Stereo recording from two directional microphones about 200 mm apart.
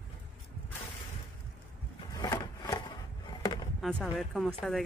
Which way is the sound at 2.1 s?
20° left (ahead or behind).